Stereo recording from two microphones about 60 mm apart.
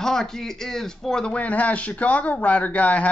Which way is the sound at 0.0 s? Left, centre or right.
Centre.